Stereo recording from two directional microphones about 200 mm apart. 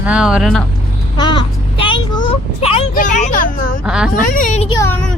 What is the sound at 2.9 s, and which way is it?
Speech, 40° left (ahead or behind).